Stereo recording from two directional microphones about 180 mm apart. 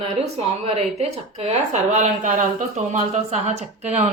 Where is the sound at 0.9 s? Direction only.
35° right (ahead or behind).